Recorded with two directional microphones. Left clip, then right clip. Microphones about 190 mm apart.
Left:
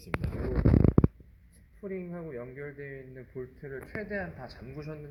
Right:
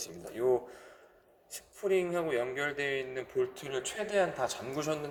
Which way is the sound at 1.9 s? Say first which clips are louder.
Right 10 dB; 30° right (ahead or behind).